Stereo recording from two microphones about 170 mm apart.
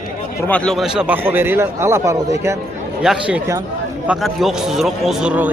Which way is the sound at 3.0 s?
5° right (ahead or behind).